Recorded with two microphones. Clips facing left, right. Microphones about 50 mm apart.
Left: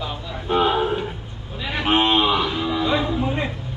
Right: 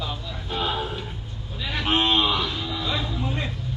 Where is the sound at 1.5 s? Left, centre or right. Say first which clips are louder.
Left 4 dB; left.